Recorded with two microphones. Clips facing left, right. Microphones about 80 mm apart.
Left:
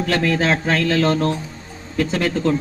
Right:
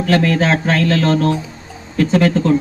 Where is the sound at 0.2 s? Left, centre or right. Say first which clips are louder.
Right 3 dB; centre.